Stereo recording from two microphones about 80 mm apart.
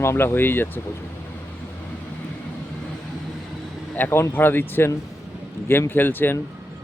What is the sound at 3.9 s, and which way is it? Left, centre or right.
Speech, left.